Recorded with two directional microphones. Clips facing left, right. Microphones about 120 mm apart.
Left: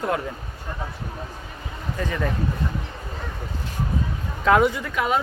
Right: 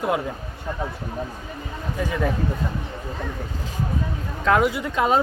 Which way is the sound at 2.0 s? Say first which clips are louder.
Right 2 dB; 5° right (ahead or behind).